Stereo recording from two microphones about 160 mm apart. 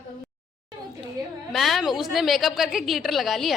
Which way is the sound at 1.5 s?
Centre (ahead or behind).